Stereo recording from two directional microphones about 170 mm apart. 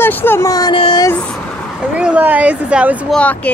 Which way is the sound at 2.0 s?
10° right (ahead or behind).